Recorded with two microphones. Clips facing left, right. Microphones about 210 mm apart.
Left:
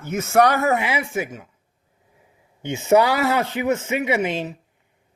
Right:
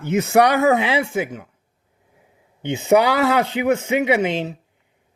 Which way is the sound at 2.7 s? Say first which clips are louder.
Right 1 dB; 15° right (ahead or behind).